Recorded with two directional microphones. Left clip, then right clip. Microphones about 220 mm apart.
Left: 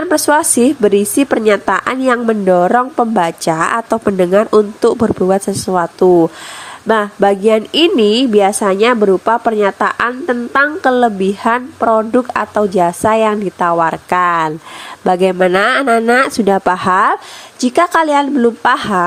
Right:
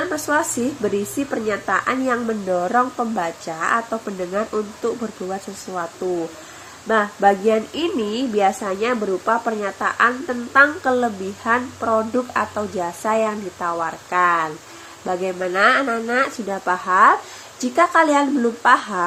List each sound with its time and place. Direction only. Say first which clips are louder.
0.1 s a woman's voice: left 9 dB; 45° left (ahead or behind)